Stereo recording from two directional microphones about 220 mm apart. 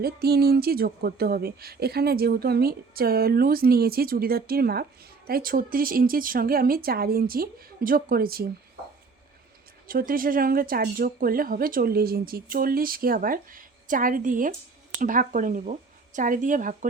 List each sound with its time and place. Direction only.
0.0 s speech: 45° right (ahead or behind)
9.8 s speech: 40° right (ahead or behind)